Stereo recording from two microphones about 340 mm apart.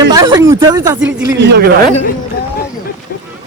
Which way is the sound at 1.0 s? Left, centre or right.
Right.